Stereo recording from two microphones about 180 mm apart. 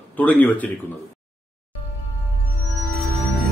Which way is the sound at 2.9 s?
Centre (ahead or behind).